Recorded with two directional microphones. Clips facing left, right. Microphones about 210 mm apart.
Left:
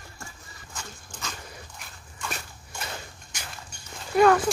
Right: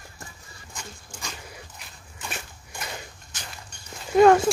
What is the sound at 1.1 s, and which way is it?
Dog, 10° right (ahead or behind).